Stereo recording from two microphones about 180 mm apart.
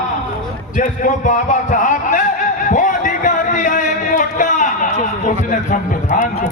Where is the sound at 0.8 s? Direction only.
45° left (ahead or behind).